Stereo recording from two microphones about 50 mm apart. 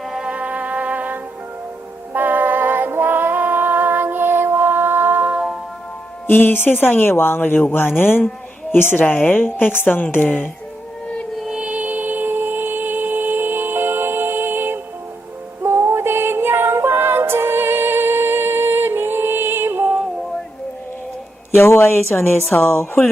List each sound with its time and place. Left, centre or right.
0.0 s music: centre
0.3 s music: right
6.2 s a woman's voice: left
11.6 s music: right
15.6 s music: right
21.5 s speech: left
22.4 s a woman's voice: left